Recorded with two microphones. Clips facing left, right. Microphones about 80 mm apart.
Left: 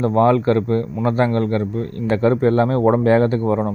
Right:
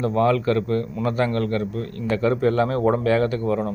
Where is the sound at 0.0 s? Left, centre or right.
Left.